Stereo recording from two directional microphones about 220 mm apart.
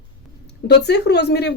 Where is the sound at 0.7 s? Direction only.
50° left (ahead or behind).